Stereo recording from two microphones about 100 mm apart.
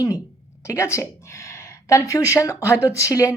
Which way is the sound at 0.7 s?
30° left (ahead or behind).